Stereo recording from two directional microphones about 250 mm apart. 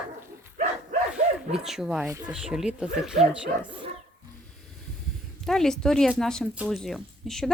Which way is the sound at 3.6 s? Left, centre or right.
Right.